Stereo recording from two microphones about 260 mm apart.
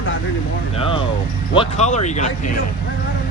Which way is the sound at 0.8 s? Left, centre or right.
Left.